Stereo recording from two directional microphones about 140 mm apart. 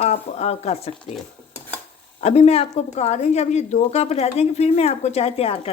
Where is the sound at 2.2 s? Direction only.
50° left (ahead or behind).